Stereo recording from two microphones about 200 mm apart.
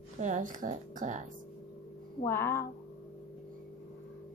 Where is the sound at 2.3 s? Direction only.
10° left (ahead or behind).